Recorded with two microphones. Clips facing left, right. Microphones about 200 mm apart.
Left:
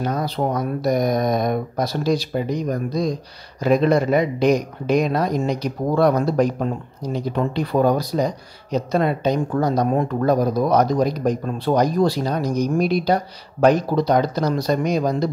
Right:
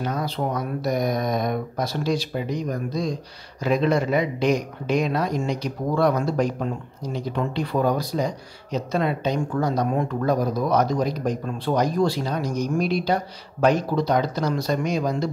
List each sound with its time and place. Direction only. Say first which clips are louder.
0.0 s speech: left 4 dB; 40° left (ahead or behind)